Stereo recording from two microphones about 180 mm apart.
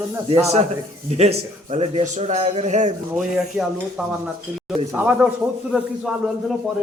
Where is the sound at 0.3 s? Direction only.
35° right (ahead or behind).